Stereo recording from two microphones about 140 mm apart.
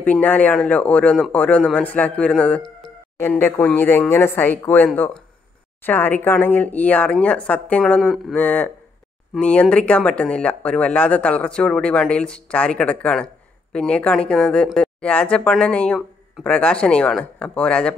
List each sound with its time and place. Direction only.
0.0 s speech: 10° left (ahead or behind)
8.4 s speech: 10° left (ahead or behind)